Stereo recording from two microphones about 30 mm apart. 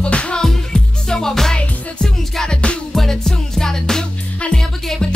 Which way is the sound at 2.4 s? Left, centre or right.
Left.